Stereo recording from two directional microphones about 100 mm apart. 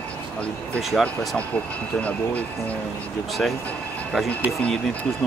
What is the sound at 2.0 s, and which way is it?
Speech, 15° left (ahead or behind).